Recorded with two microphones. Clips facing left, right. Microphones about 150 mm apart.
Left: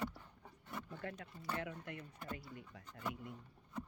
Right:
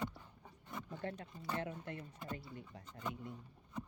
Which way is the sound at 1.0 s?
35° right (ahead or behind).